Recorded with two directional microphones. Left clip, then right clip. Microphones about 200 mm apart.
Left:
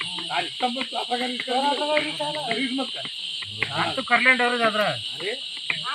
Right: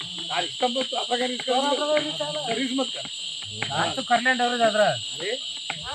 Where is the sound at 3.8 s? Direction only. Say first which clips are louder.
Left 2 dB; 50° right (ahead or behind).